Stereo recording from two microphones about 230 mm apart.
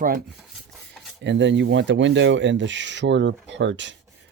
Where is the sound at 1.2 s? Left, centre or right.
Right.